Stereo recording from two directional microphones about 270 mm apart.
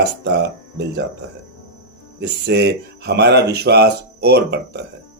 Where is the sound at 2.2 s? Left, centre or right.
Right.